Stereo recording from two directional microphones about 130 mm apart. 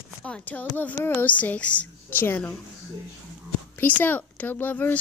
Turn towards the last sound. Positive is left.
turn(degrees=15)  # may be behind; listen again after turning